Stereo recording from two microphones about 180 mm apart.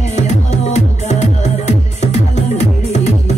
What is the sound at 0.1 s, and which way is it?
Music, 40° left (ahead or behind).